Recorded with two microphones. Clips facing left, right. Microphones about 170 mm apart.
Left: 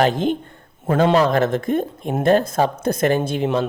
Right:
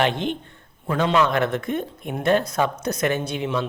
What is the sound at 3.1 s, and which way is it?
Speech, 40° left (ahead or behind).